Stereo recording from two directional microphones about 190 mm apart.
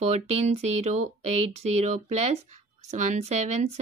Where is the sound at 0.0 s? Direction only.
35° right (ahead or behind).